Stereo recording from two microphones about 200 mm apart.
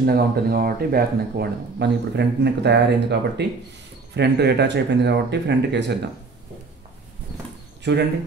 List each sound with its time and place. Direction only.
0.0 s speech: 50° right (ahead or behind)